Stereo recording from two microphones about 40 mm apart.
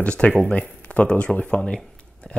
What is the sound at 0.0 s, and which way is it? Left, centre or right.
Speech, left.